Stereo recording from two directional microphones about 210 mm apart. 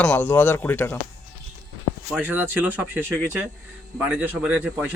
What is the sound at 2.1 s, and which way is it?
Speech, 10° right (ahead or behind).